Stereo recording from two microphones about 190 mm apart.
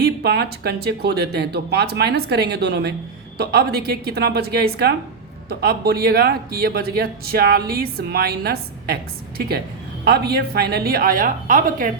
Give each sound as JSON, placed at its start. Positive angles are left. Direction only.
{"t": 0.0, "sound": "speech", "side_deg": -60}
{"t": 10.0, "sound": "a woman's voice", "side_deg": -55}